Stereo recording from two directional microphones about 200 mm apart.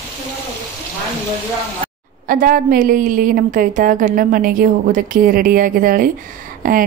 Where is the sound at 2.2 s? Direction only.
45° right (ahead or behind).